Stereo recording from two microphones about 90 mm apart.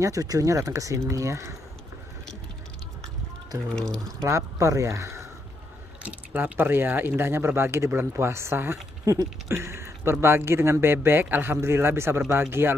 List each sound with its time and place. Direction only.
0.0 s speech: 40° right (ahead or behind)
3.7 s speech: 10° left (ahead or behind)
4.2 s speech: 35° right (ahead or behind)
6.0 s speech: 20° right (ahead or behind)